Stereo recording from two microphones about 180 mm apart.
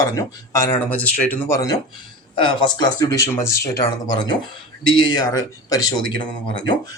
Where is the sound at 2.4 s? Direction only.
25° left (ahead or behind).